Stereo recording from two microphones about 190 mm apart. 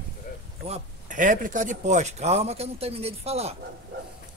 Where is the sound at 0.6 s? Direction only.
35° right (ahead or behind).